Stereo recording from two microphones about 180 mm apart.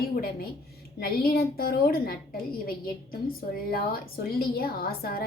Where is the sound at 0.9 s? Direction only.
55° left (ahead or behind).